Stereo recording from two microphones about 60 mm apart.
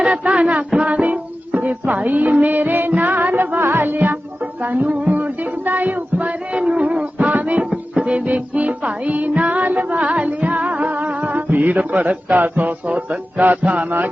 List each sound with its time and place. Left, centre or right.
0.0 s music: centre
7.6 s music: centre